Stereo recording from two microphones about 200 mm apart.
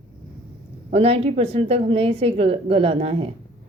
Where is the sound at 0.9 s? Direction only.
30° right (ahead or behind).